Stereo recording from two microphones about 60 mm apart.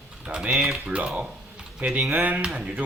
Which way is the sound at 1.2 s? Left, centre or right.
Centre.